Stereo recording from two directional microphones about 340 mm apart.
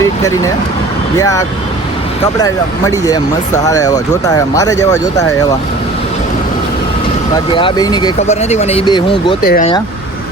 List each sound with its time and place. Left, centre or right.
1.2 s speech: centre
7.3 s speech: centre